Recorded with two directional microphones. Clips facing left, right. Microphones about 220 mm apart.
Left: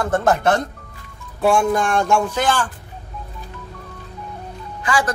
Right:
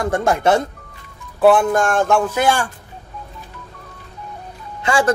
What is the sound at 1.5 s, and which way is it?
Speech, 50° right (ahead or behind).